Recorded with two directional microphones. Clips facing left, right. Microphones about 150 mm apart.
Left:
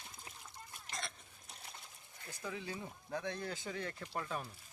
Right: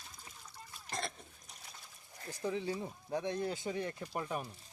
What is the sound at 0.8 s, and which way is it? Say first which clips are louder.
Cough: right 6 dB; 40° right (ahead or behind).